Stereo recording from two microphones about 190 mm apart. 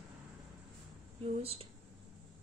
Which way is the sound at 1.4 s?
30° right (ahead or behind).